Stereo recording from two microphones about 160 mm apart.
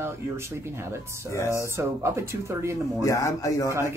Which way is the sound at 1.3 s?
20° left (ahead or behind).